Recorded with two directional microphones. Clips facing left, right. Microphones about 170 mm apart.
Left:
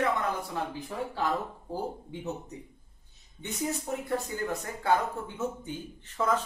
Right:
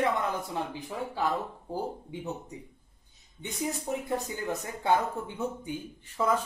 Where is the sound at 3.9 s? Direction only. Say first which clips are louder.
Right 1 dB; 10° right (ahead or behind).